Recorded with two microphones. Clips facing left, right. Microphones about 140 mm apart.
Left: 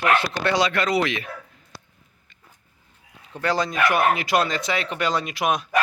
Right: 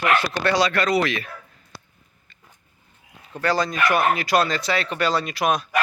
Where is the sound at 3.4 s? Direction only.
20° left (ahead or behind).